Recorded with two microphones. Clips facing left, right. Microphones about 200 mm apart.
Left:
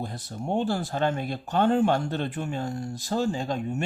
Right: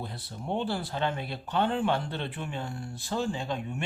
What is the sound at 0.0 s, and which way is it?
Speech, 45° left (ahead or behind).